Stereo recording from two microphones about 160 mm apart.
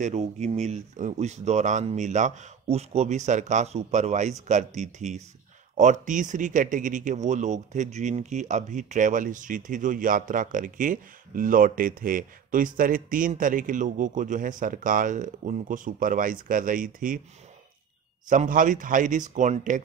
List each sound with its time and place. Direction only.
0.0 s a man's voice: 45° right (ahead or behind)
18.3 s a man's voice: 55° right (ahead or behind)